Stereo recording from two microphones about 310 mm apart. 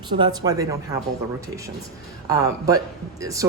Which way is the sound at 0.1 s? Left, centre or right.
Centre.